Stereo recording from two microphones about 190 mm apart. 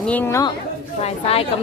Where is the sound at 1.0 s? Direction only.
30° left (ahead or behind).